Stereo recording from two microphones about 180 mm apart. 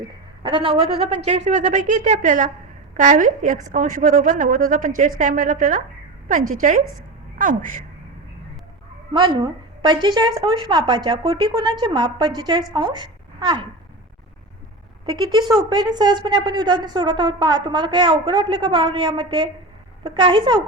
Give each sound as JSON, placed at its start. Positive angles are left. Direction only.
{"t": 0.0, "sound": "a woman's voice", "side_deg": -25}
{"t": 9.1, "sound": "a woman's voice", "side_deg": -25}
{"t": 15.0, "sound": "a woman's voice", "side_deg": -25}